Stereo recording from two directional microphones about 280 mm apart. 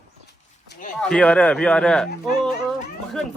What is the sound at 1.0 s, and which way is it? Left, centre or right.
Speech, centre.